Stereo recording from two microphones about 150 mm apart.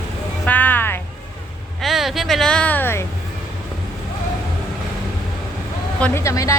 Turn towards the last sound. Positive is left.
turn(degrees=20)  # may be behind; listen again after turning